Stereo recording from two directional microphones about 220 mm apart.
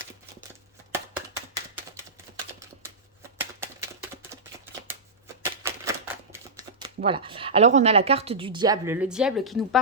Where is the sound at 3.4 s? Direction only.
10° right (ahead or behind).